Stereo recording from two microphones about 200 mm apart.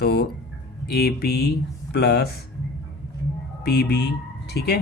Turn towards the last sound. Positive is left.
turn(degrees=55)  # may be behind; listen again after turning